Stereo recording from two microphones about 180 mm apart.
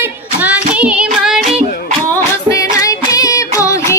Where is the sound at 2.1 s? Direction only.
15° left (ahead or behind).